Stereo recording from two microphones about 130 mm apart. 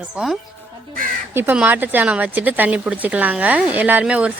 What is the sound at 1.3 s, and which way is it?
A woman's voice, 15° right (ahead or behind).